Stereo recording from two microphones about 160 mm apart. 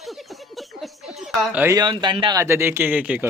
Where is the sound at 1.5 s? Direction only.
10° right (ahead or behind).